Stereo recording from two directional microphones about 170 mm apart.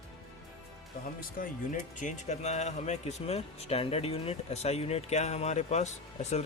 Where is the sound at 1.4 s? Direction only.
55° left (ahead or behind).